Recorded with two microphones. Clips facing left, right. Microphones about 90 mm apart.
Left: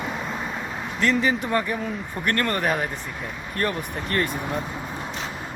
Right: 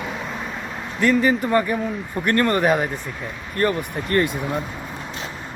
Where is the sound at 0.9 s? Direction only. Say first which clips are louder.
Right 4 dB; 5° right (ahead or behind).